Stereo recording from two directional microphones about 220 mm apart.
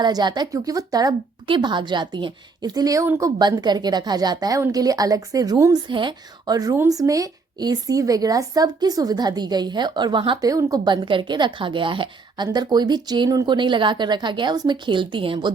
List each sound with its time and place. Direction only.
0.0 s a woman's voice: 20° right (ahead or behind)